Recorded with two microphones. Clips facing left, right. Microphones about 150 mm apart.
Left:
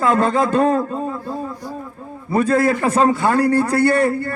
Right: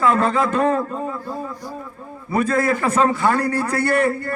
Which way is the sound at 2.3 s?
35° left (ahead or behind).